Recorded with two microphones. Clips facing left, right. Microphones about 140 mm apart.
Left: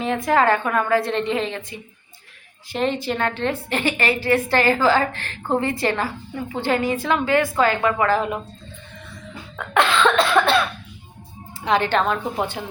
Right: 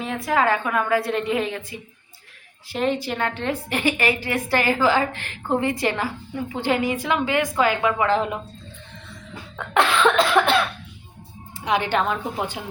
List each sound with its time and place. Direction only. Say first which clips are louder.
0.0 s a woman's voice: left 3 dB; centre (ahead or behind); by 8.3 s 20° right (ahead or behind)
10.0 s a woman's voice: even; 15° right (ahead or behind)
11.6 s a woman's voice: left 2 dB; 15° right (ahead or behind)